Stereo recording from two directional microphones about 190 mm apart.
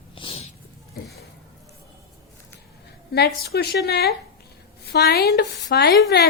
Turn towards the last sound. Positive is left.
turn(degrees=60)  # may be behind; listen again after turning